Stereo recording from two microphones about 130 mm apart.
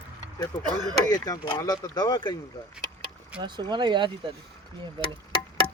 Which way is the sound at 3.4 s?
35° right (ahead or behind).